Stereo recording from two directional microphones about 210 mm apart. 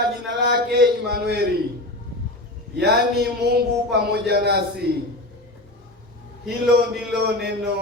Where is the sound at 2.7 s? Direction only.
50° right (ahead or behind).